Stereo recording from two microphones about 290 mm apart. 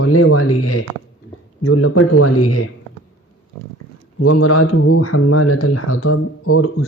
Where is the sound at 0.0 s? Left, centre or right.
Left.